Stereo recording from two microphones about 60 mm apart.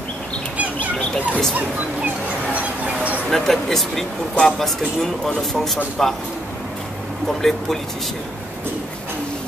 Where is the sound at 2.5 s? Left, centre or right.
Right.